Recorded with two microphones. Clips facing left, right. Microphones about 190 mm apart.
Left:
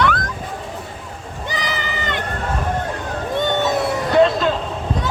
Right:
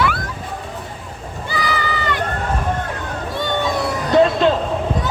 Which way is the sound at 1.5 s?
20° left (ahead or behind).